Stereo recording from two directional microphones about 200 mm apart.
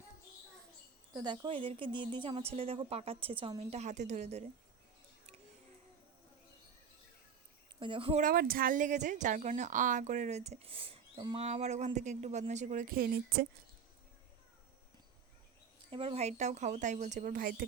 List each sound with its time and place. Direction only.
1.1 s a woman's voice: 20° right (ahead or behind)
7.8 s a woman's voice: 25° right (ahead or behind)
8.2 s a woman's voice: 45° right (ahead or behind)
15.9 s a woman's voice: 30° right (ahead or behind); by 17.7 s 45° right (ahead or behind)